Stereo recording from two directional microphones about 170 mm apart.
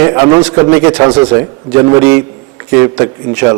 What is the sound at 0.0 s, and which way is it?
A man's voice, 20° right (ahead or behind).